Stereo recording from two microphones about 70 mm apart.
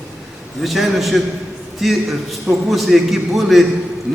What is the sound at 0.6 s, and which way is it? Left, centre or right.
A man's voice, centre.